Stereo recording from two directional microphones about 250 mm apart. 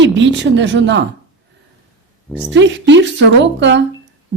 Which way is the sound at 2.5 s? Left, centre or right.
Right.